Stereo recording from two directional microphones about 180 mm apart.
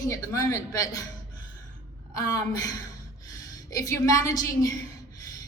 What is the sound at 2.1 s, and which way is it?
A woman's voice, 20° left (ahead or behind).